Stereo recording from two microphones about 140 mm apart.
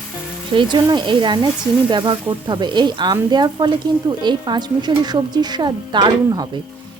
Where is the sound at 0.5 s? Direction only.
30° right (ahead or behind).